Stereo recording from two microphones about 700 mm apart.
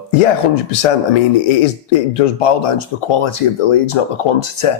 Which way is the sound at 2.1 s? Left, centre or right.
Left.